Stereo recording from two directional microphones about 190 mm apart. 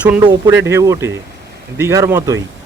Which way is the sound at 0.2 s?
20° right (ahead or behind).